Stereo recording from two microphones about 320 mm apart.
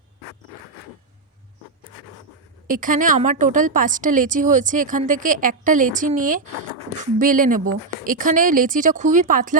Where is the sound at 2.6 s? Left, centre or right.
Right.